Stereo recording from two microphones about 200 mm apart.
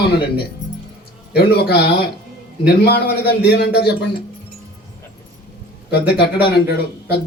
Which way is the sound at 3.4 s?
55° left (ahead or behind).